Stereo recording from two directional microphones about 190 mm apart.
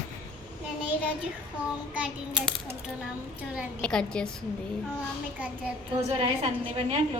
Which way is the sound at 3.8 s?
5° left (ahead or behind).